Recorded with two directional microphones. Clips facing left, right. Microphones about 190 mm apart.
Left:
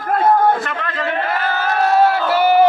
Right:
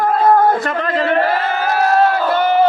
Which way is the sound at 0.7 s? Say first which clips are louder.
Right 6 dB; 35° right (ahead or behind).